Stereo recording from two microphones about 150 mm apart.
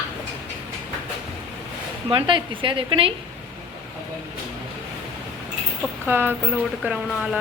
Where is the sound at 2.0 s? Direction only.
35° right (ahead or behind).